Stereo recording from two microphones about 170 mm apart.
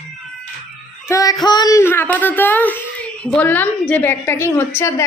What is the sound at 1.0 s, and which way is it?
Music, 20° left (ahead or behind).